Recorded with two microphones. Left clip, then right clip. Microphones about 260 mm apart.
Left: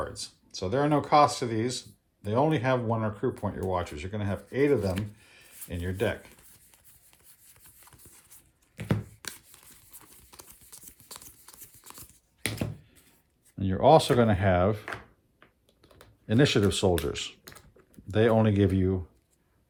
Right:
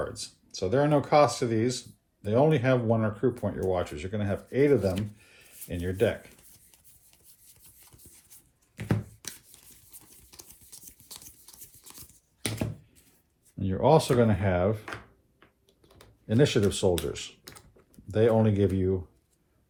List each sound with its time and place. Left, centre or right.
0.0 s speech: left
6.7 s a sound: centre
8.1 s tearing: centre
13.6 s speech: left
16.2 s speech: left